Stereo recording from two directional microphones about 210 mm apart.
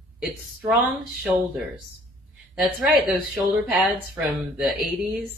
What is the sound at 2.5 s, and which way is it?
Speech, 5° right (ahead or behind).